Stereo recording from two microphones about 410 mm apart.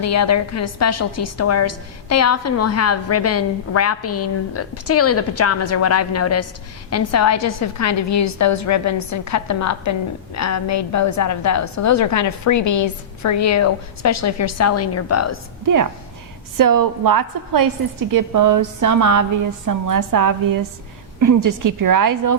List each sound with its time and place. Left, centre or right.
0.0 s a woman's voice: left
15.6 s a woman's voice: right